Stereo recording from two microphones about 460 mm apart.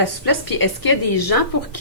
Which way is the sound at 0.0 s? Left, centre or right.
Left.